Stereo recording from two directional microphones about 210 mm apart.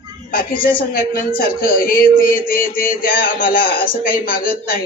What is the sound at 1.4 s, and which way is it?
Speech, 45° left (ahead or behind).